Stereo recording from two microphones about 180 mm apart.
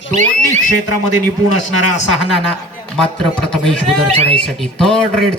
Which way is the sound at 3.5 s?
Centre (ahead or behind).